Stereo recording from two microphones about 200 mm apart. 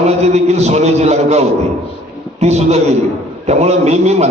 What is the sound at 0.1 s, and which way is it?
A man's voice, 30° right (ahead or behind).